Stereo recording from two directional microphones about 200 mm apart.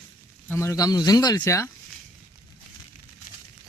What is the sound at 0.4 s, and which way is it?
Speech, 15° left (ahead or behind).